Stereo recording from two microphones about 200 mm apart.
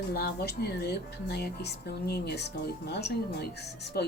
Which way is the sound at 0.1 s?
50° left (ahead or behind).